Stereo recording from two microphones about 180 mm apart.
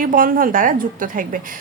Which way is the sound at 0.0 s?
50° right (ahead or behind).